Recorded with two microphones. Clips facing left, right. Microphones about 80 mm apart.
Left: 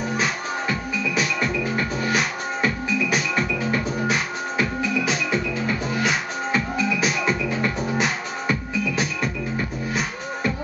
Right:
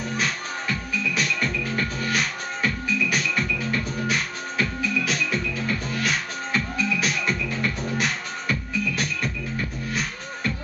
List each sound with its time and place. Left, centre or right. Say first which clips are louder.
0.0 s music: left 3 dB; centre